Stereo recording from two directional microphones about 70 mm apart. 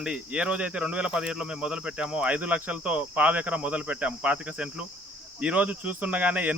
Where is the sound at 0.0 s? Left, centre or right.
Centre.